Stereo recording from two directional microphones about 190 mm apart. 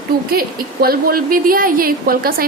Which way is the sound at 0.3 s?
50° right (ahead or behind).